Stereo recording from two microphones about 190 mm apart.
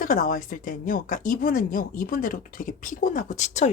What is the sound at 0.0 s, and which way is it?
A woman's voice, 45° left (ahead or behind).